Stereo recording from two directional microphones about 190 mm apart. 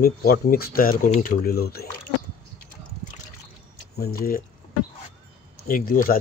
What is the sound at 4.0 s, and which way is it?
Speech, 50° left (ahead or behind).